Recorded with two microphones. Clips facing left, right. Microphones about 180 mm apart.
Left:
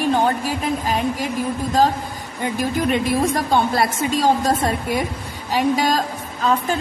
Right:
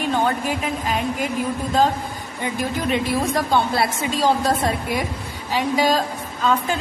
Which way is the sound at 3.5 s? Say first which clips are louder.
Left 1 dB; 45° left (ahead or behind).